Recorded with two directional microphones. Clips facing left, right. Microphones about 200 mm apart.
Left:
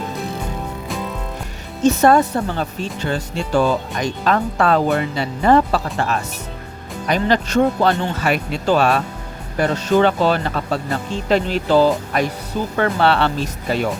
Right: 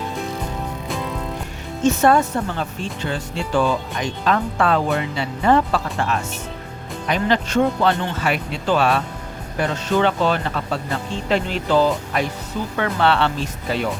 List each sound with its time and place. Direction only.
1.8 s speech: 40° left (ahead or behind)